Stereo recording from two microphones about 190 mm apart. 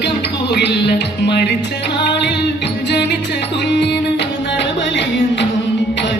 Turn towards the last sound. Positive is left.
turn(degrees=65)  # may be behind; listen again after turning